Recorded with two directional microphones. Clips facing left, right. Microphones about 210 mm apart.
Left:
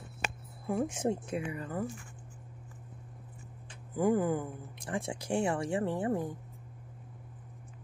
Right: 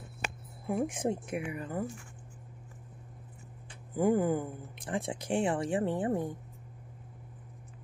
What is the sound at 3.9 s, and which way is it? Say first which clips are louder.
Speech: right 1 dB; 25° right (ahead or behind).